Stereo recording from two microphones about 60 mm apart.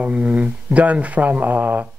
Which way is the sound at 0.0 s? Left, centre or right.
Right.